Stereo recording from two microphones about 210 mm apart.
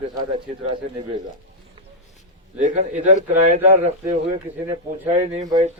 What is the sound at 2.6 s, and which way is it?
A man's voice, 35° right (ahead or behind).